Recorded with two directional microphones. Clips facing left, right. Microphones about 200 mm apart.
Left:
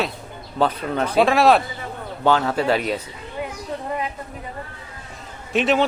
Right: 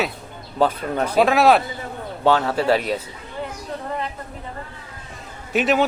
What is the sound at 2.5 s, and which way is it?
Speech, 35° right (ahead or behind).